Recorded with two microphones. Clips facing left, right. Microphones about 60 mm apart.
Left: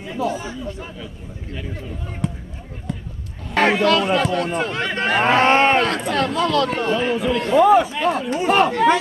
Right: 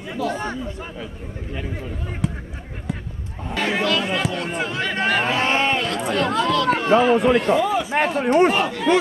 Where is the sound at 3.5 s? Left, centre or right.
Left.